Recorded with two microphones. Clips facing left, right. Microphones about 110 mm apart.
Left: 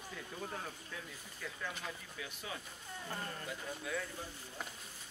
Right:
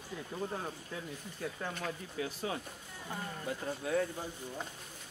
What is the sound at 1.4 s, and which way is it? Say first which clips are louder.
Speech: right 5 dB; 40° right (ahead or behind).